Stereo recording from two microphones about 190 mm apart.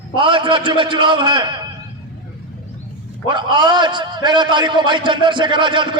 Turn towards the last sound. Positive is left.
turn(degrees=-25)  # may be behind; listen again after turning